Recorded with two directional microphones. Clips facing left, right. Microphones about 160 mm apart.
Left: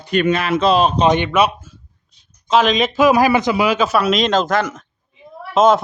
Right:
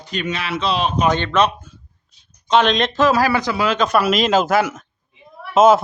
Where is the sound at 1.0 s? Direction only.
15° left (ahead or behind); by 5.8 s 5° right (ahead or behind).